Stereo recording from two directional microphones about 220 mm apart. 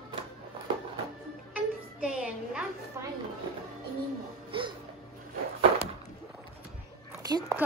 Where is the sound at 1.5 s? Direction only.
5° right (ahead or behind).